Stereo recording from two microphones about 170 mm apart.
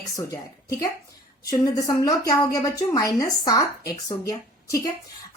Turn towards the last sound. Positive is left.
turn(degrees=20)  # may be behind; listen again after turning